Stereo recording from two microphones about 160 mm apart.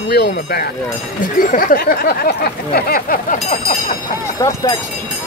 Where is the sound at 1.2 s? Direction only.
60° left (ahead or behind).